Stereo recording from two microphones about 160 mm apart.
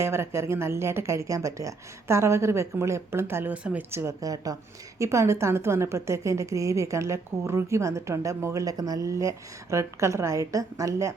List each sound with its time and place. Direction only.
0.0 s a woman's voice: 15° right (ahead or behind)